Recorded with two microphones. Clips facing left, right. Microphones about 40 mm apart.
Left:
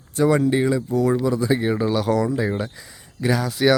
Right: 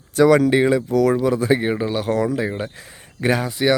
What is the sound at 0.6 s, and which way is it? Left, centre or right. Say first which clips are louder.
Speech: right 3 dB; right.